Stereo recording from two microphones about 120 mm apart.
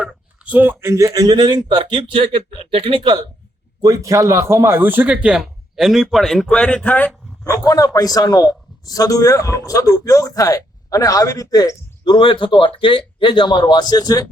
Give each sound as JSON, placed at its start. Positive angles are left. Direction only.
{"t": 0.0, "sound": "speech", "side_deg": -15}
{"t": 3.8, "sound": "speech", "side_deg": -30}
{"t": 7.7, "sound": "a man's voice", "side_deg": 30}
{"t": 12.1, "sound": "speech", "side_deg": 45}